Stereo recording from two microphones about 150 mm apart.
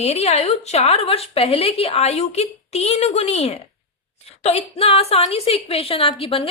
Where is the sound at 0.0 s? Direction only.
45° left (ahead or behind).